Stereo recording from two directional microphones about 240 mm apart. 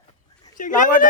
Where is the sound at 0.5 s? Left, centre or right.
Left.